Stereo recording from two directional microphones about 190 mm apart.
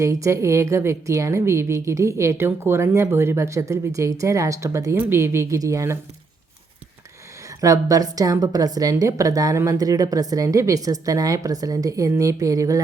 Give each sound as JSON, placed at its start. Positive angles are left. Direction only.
{"t": 0.0, "sound": "a woman's voice", "side_deg": -15}
{"t": 7.6, "sound": "a woman's voice", "side_deg": -15}